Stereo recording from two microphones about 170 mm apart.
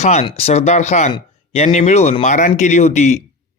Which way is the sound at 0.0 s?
40° left (ahead or behind).